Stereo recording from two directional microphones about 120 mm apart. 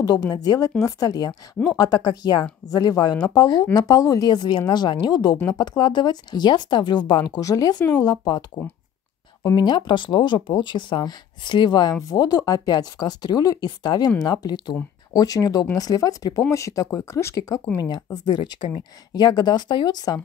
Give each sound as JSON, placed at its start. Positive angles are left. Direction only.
{"t": 0.0, "sound": "speech", "side_deg": 35}
{"t": 9.6, "sound": "speech", "side_deg": 40}